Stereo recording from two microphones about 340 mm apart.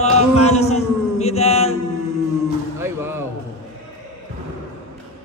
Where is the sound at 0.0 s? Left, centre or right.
Centre.